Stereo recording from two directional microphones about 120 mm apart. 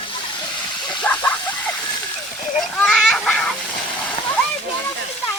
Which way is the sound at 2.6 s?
Centre (ahead or behind).